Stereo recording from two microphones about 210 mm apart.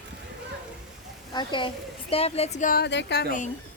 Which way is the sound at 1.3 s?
20° left (ahead or behind).